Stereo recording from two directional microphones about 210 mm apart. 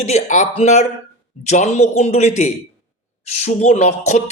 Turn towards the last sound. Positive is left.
turn(degrees=35)  # may be behind; listen again after turning